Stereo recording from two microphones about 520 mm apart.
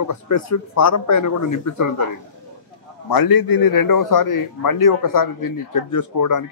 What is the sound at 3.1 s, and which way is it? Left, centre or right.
A man's voice, left.